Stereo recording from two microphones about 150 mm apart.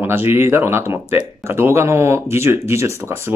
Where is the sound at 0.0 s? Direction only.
15° right (ahead or behind).